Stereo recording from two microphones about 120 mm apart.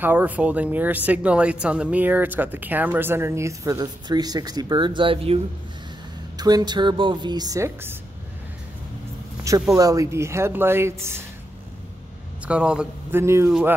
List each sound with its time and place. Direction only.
0.0 s speech: 15° right (ahead or behind); by 5.4 s 50° right (ahead or behind)
6.3 s a woman's voice: 35° right (ahead or behind)
9.4 s speech: 25° right (ahead or behind)
12.4 s speech: 10° right (ahead or behind)
13.1 s speech: 20° right (ahead or behind)
13.5 s speech: 10° right (ahead or behind)